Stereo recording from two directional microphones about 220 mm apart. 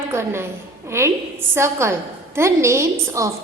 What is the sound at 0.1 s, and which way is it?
A woman's voice, 10° right (ahead or behind).